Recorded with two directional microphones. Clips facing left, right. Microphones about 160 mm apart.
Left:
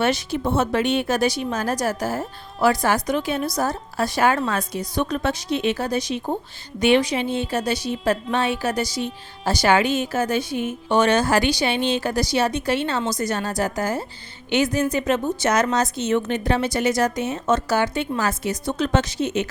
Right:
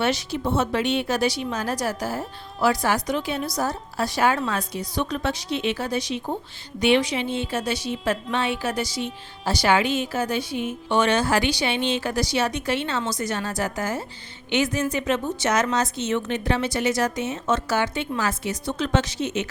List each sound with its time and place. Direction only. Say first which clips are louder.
0.0 s a woman's voice: left 2 dB; 50° left (ahead or behind)